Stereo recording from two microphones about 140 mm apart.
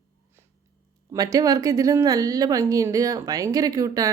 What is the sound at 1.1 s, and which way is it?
A woman's voice, 25° right (ahead or behind).